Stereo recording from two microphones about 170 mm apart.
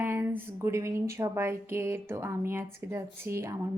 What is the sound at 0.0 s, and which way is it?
Speech, 15° right (ahead or behind).